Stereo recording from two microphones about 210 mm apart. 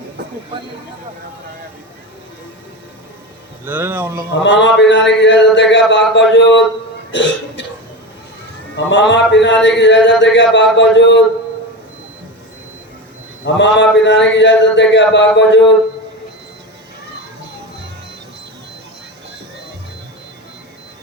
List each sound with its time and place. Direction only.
3.7 s speech: 10° right (ahead or behind)
4.4 s a man's voice: 60° left (ahead or behind)
7.1 s cough: 60° left (ahead or behind)
8.7 s a man's voice: 60° left (ahead or behind)
13.4 s a man's voice: 60° left (ahead or behind)